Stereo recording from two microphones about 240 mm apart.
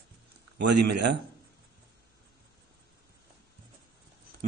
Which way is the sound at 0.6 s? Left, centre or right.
Right.